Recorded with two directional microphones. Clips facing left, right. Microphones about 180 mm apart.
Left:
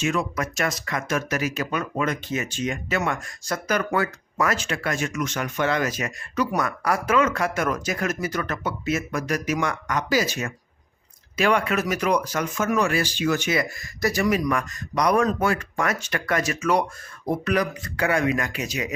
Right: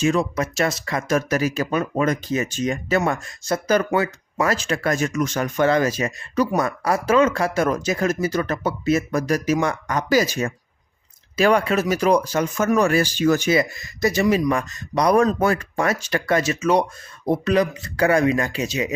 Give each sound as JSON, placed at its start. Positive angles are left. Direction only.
{"t": 0.0, "sound": "speech", "side_deg": -35}
{"t": 4.5, "sound": "speech", "side_deg": -40}
{"t": 10.1, "sound": "speech", "side_deg": -40}
{"t": 12.5, "sound": "speech", "side_deg": -40}
{"t": 13.6, "sound": "speech", "side_deg": -20}